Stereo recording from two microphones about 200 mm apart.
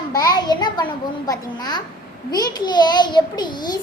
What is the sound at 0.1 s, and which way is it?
A child's voice, 20° left (ahead or behind).